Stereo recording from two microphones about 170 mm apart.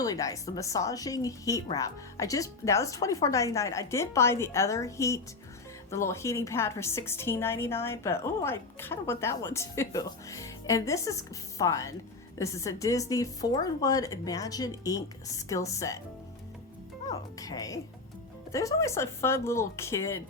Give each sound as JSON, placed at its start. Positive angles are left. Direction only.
{"t": 0.0, "sound": "a woman's voice", "side_deg": 20}
{"t": 17.1, "sound": "a woman's voice", "side_deg": 20}